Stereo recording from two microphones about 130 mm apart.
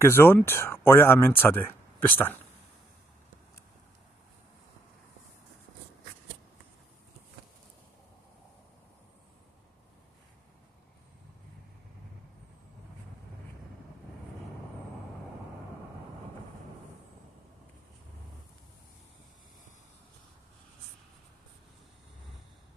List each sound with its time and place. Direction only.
0.0 s speech: 20° left (ahead or behind)